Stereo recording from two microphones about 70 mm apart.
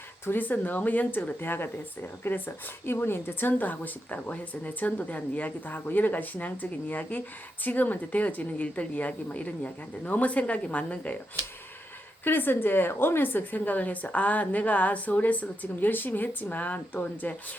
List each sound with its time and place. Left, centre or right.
0.3 s a woman's voice: left
12.2 s a woman's voice: left